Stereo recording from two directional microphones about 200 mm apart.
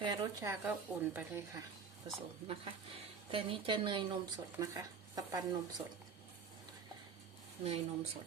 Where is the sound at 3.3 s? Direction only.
25° right (ahead or behind).